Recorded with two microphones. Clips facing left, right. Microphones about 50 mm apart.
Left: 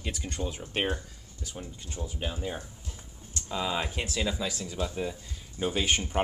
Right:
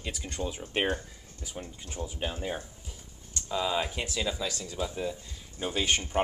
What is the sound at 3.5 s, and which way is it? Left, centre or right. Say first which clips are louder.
Speech: right 1 dB; centre.